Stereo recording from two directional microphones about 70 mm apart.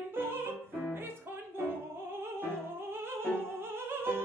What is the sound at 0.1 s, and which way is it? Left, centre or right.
Music, right.